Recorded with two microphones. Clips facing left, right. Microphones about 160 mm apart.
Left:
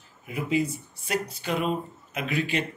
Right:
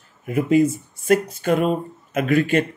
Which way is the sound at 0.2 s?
50° right (ahead or behind).